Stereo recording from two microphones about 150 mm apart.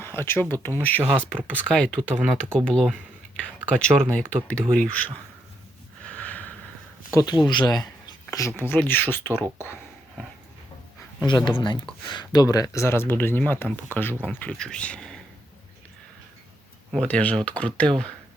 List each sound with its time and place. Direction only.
0.0 s speech: 15° left (ahead or behind)
6.1 s a sound: 10° left (ahead or behind)
7.1 s speech: 20° left (ahead or behind)
11.3 s speech: 30° left (ahead or behind); by 15.2 s 5° left (ahead or behind)
16.9 s speech: 5° left (ahead or behind)